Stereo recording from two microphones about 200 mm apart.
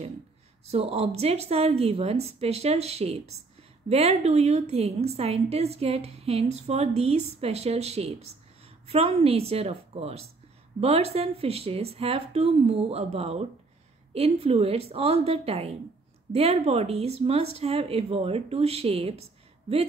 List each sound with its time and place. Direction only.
0.7 s a woman's voice: 30° right (ahead or behind)